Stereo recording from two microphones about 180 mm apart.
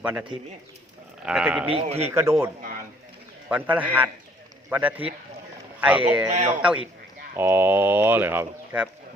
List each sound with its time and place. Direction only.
0.0 s speech: 10° right (ahead or behind)
1.6 s a man's voice: 35° right (ahead or behind)
2.0 s speech: 15° right (ahead or behind)
3.5 s speech: 10° right (ahead or behind)